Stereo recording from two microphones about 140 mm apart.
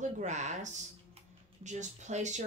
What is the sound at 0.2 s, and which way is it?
Speech, 55° right (ahead or behind).